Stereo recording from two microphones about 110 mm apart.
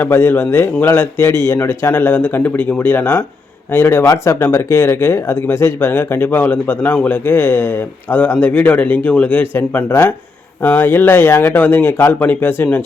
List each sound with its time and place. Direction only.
0.0 s speech: 20° left (ahead or behind)
4.0 s speech: 35° left (ahead or behind)
4.4 s speech: 25° left (ahead or behind)